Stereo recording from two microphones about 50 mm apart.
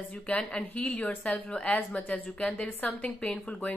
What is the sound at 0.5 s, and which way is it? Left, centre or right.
A woman's voice, left.